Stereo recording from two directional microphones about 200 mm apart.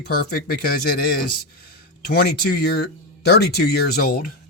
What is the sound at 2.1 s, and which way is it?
Speech, 55° left (ahead or behind).